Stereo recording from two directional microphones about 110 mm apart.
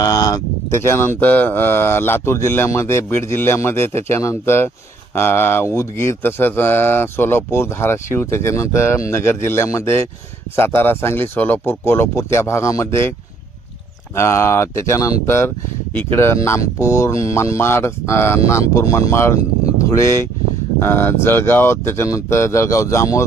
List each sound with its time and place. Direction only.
0.0 s speech: 35° left (ahead or behind)
0.8 s speech: 20° left (ahead or behind)
14.2 s speech: 25° left (ahead or behind)